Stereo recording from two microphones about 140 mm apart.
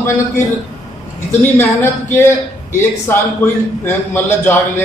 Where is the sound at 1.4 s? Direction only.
15° left (ahead or behind).